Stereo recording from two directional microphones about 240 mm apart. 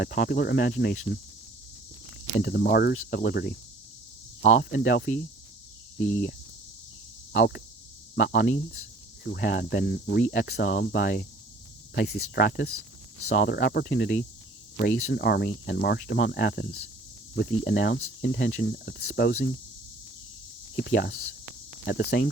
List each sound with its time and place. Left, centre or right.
0.0 s speech: left
2.4 s speech: left
7.3 s speech: left
9.3 s speech: left
20.7 s speech: left